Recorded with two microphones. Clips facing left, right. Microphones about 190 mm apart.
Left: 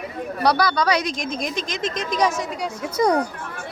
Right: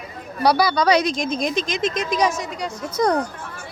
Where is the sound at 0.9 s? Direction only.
25° right (ahead or behind).